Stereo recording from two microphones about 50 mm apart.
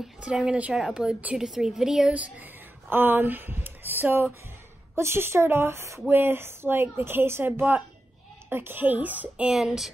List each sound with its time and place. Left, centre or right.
0.2 s a woman's voice: right
1.4 s a woman's voice: centre
2.1 s a woman's voice: right
2.9 s speech: right
4.9 s a woman's voice: right
6.0 s speech: right
7.4 s a woman's voice: right
8.5 s a woman's voice: right
9.5 s a woman's voice: centre